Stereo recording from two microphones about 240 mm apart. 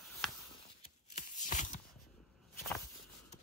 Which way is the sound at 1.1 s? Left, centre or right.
Left.